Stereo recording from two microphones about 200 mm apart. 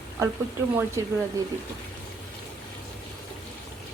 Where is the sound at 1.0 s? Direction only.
15° right (ahead or behind).